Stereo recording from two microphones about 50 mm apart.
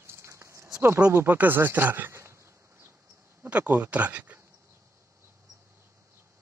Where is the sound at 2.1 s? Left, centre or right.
Right.